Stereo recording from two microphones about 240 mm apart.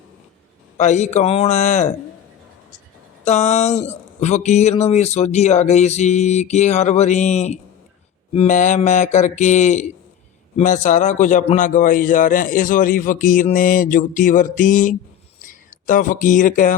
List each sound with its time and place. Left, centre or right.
0.8 s speech: left
3.2 s a man's voice: left